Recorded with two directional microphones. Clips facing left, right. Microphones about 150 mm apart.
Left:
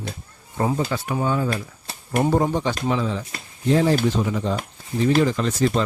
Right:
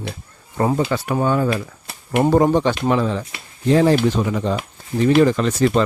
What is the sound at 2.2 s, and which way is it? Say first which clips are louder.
Speech: right 5 dB; 75° right (ahead or behind).